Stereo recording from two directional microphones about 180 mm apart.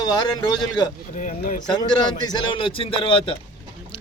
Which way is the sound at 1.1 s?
45° left (ahead or behind).